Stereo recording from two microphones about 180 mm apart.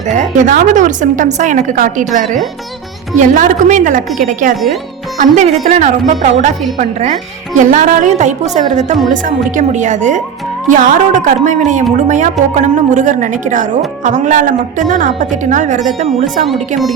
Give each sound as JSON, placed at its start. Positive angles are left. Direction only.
{"t": 0.1, "sound": "a woman's voice", "side_deg": -45}
{"t": 16.5, "sound": "speech", "side_deg": 0}